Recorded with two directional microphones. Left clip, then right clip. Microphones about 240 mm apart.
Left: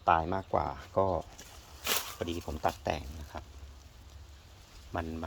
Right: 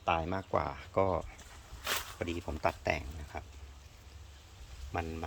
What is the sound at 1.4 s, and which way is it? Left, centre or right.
Walk, left.